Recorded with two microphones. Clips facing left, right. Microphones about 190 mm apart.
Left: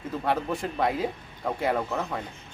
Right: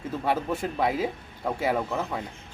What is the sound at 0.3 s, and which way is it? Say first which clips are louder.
Speech: right 1 dB; 5° right (ahead or behind).